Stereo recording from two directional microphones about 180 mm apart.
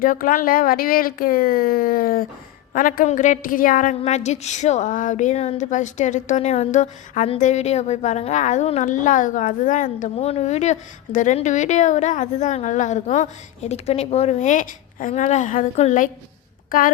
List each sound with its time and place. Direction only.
0.0 s a woman's voice: 50° left (ahead or behind)